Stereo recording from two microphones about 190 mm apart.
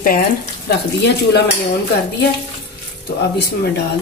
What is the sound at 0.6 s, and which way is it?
Speech, 60° left (ahead or behind).